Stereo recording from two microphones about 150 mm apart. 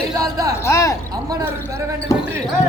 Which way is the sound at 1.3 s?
25° right (ahead or behind).